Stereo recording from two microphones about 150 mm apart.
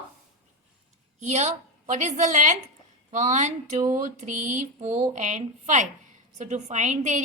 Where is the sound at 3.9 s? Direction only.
55° right (ahead or behind).